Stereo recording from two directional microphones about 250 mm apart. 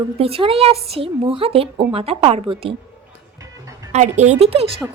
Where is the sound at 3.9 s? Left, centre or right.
Right.